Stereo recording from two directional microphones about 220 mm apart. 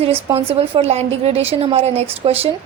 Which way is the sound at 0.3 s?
25° right (ahead or behind).